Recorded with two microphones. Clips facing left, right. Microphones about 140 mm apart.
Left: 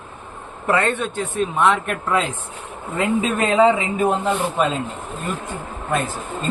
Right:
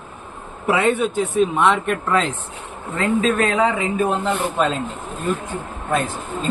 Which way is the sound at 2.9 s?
15° left (ahead or behind).